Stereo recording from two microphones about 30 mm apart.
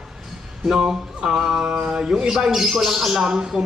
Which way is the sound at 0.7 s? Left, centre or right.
Right.